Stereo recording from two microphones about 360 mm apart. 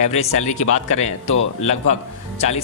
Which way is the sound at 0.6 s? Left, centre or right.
Left.